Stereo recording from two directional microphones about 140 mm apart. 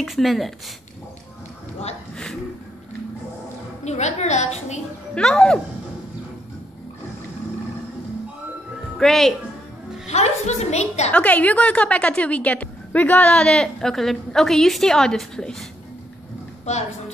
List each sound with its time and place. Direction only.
0.0 s a woman's voice: centre (ahead or behind)
3.8 s a woman's voice: 55° left (ahead or behind)
5.1 s a woman's voice: 5° left (ahead or behind)
8.9 s a woman's voice: centre (ahead or behind)
10.0 s a woman's voice: 50° left (ahead or behind)
11.1 s a woman's voice: 10° left (ahead or behind)